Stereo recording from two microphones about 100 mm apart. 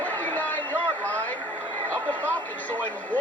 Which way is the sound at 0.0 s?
15° left (ahead or behind).